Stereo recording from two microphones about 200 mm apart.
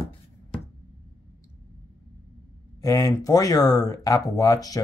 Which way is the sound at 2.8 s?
15° left (ahead or behind).